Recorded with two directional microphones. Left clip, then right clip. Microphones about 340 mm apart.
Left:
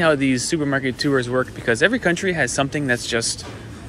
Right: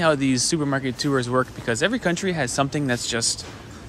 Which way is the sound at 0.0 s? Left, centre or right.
Centre.